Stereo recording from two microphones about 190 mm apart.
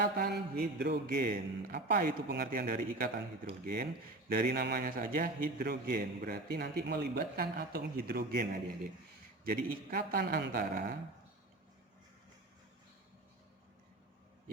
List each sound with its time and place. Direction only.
0.0 s a man's voice: 55° right (ahead or behind)
4.4 s a man's voice: 55° right (ahead or behind)